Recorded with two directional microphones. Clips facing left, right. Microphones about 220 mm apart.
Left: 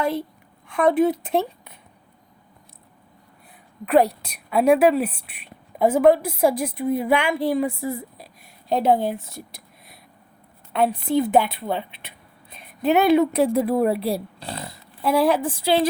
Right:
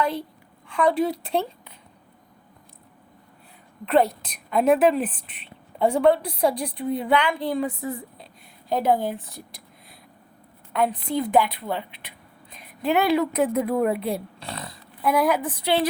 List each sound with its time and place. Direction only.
0.0 s speech: 25° left (ahead or behind)
3.8 s a woman's voice: 15° left (ahead or behind)
10.7 s a woman's voice: 25° left (ahead or behind)
13.4 s speech: 35° left (ahead or behind)